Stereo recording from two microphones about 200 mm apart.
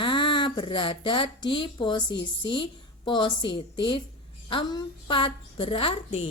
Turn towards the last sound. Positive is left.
turn(degrees=25)  # may be behind; listen again after turning